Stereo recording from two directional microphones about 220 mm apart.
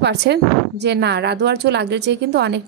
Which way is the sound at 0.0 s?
50° right (ahead or behind).